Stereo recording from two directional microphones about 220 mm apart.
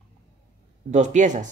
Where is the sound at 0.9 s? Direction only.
30° right (ahead or behind).